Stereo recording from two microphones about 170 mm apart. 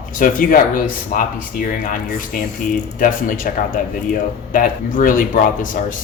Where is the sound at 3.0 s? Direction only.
50° left (ahead or behind).